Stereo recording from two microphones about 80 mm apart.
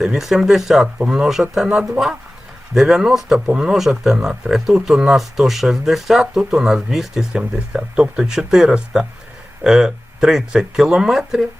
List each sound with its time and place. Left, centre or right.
0.0 s speech: centre